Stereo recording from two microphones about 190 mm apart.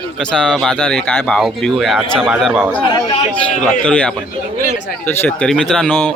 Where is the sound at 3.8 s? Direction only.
5° left (ahead or behind).